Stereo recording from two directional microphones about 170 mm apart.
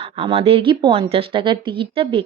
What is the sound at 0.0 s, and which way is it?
A woman's voice, 35° right (ahead or behind).